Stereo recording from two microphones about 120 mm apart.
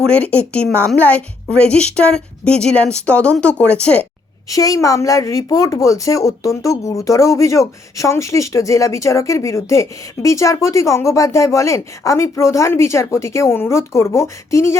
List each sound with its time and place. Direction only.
0.0 s a woman's voice: 10° left (ahead or behind)
4.4 s a woman's voice: 30° left (ahead or behind)